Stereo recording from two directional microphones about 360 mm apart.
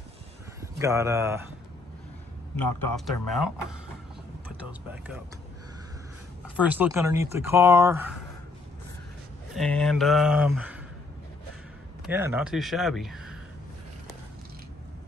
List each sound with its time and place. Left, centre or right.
0.6 s speech: centre
2.6 s a man's voice: left
3.1 s speech: centre
6.4 s speech: centre
9.5 s speech: centre
12.1 s speech: centre